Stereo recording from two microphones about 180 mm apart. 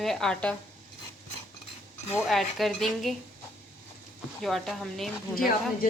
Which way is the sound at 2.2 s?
Centre (ahead or behind).